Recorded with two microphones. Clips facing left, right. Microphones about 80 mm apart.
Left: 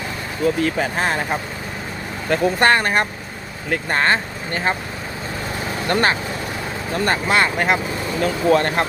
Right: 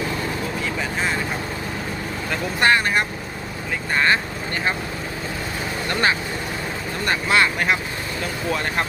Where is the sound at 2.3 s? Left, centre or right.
Left.